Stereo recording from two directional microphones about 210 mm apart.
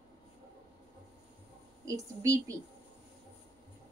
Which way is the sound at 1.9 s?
15° right (ahead or behind).